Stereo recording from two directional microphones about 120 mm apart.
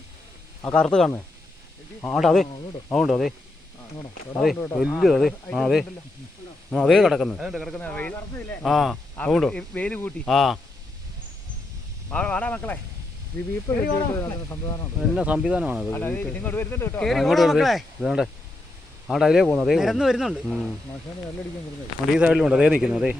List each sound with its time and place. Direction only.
0.7 s speech: 5° left (ahead or behind)
2.1 s speech: centre (ahead or behind)
4.4 s speech: 5° right (ahead or behind)
7.8 s speech: 10° left (ahead or behind)
10.2 s speech: centre (ahead or behind)
12.1 s speech: 10° left (ahead or behind)
13.7 s speech: 25° left (ahead or behind)
15.1 s speech: 5° right (ahead or behind)
15.9 s speech: 15° left (ahead or behind)
17.0 s speech: centre (ahead or behind)
22.2 s speech: 5° right (ahead or behind)